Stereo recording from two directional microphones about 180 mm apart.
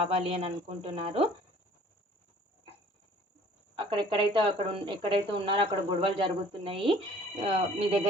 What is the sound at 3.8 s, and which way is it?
Speech, 25° right (ahead or behind).